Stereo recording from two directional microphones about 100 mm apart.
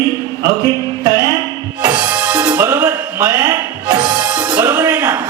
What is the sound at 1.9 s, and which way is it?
Music, 15° right (ahead or behind).